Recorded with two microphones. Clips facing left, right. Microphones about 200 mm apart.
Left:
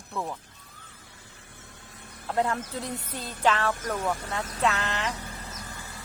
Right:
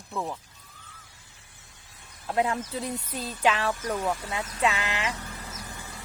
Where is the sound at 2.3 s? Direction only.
10° right (ahead or behind).